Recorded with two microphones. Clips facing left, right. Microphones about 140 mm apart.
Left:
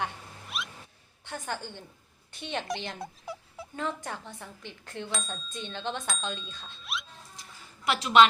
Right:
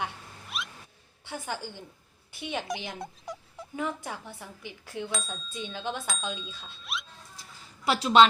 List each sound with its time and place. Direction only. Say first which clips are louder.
0.5 s a sound: even; centre (ahead or behind)
1.2 s a woman's voice: even; 10° right (ahead or behind)
3.8 s speech: right 1 dB; 10° right (ahead or behind)
8.0 s a woman's voice: right 1 dB; 30° right (ahead or behind)